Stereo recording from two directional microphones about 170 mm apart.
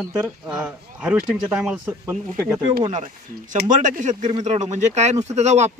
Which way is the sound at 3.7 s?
50° right (ahead or behind).